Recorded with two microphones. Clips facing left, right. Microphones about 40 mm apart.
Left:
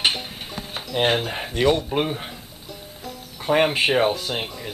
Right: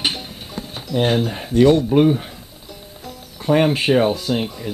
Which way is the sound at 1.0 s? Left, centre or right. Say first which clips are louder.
Right 3 dB; left.